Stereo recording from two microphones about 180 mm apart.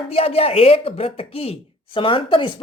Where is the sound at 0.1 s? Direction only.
35° left (ahead or behind).